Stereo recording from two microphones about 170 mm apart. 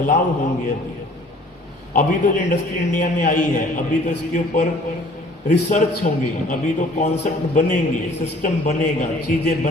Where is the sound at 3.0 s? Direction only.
50° left (ahead or behind).